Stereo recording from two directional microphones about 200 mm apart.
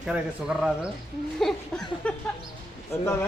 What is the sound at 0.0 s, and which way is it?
Speech, 5° right (ahead or behind).